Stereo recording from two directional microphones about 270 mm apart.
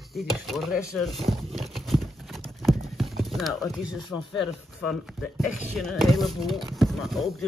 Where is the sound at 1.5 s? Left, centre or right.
Centre.